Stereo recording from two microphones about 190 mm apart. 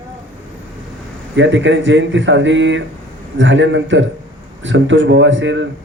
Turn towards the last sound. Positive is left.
turn(degrees=-75)  # may be behind; listen again after turning